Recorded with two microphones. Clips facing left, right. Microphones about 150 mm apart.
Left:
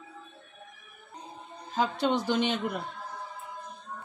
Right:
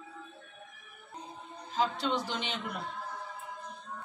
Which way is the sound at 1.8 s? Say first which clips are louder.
Left 4 dB; 50° left (ahead or behind).